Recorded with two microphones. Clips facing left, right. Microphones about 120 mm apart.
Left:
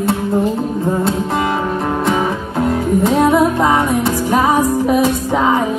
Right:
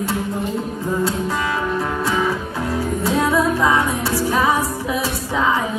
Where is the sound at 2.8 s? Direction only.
25° left (ahead or behind).